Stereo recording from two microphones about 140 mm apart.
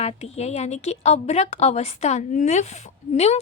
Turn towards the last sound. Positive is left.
turn(degrees=50)  # may be behind; listen again after turning